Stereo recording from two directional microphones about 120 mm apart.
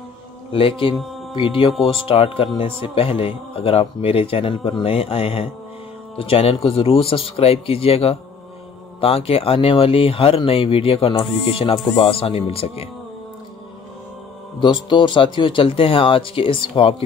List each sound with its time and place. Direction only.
0.5 s speech: 50° left (ahead or behind)
14.6 s speech: 40° left (ahead or behind)